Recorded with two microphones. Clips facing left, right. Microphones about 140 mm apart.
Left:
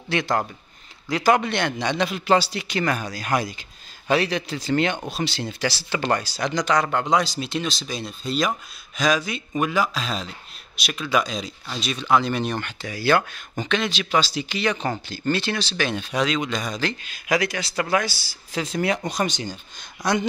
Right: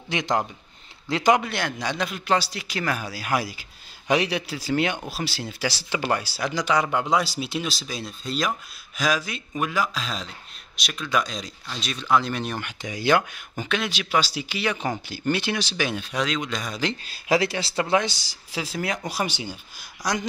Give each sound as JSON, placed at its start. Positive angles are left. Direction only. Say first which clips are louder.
{"t": 0.1, "sound": "speech", "louder": "left 1 dB", "side_deg": -15}
{"t": 1.3, "sound": "speech", "louder": "left 2 dB", "side_deg": -5}
{"t": 17.0, "sound": "speech", "louder": "right 2 dB", "side_deg": -30}
{"t": 20.0, "sound": "speech", "louder": "left 4 dB", "side_deg": 0}